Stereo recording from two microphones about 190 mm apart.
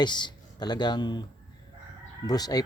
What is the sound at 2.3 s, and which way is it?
Speech, 20° left (ahead or behind).